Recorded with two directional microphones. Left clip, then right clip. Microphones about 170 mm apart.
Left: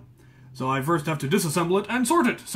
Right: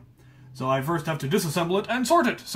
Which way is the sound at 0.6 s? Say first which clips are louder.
Left 1 dB; 15° right (ahead or behind).